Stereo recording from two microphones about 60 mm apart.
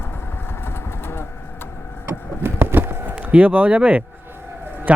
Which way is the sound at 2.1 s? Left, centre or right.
Right.